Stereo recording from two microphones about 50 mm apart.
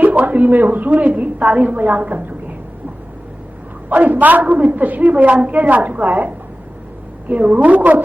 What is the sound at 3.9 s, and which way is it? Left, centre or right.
A woman's voice, right.